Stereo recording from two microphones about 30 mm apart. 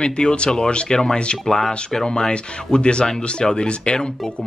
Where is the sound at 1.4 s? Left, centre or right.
Centre.